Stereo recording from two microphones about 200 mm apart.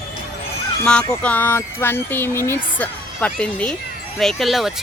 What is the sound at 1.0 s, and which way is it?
Speech, 10° left (ahead or behind).